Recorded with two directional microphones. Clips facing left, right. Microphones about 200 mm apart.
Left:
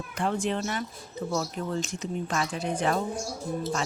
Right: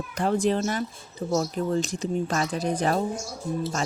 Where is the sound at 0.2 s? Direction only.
40° right (ahead or behind).